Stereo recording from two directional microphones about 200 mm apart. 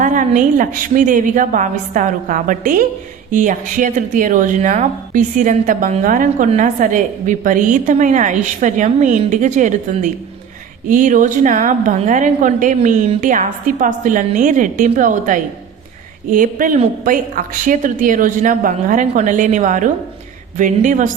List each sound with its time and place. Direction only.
0.0 s speech: 40° right (ahead or behind)